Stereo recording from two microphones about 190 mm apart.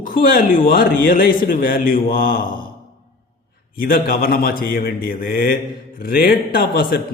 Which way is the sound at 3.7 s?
50° left (ahead or behind).